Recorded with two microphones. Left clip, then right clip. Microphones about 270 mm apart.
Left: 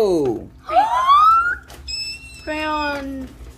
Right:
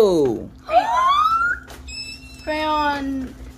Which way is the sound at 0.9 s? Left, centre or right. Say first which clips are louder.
Left 6 dB; centre.